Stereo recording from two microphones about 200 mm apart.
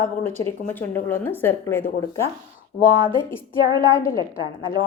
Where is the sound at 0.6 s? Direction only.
10° left (ahead or behind).